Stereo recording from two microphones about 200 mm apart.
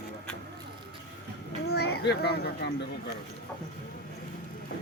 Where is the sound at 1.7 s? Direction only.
55° left (ahead or behind).